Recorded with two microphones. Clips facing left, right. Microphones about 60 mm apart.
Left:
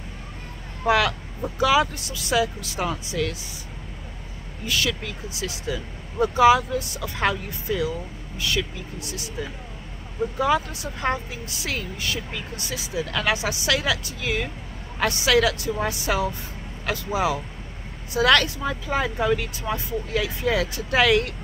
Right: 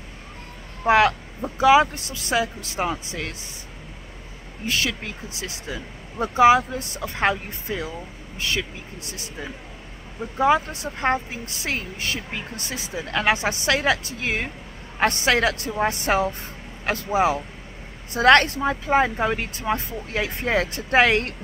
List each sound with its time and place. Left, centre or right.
0.8 s speech: right
4.6 s a woman's voice: right
10.3 s a woman's voice: right